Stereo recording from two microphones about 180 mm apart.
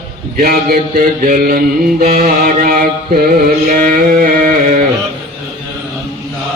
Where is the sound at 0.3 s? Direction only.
55° right (ahead or behind).